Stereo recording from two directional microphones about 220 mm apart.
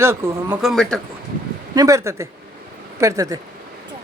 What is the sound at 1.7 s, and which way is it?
Speech, 15° right (ahead or behind).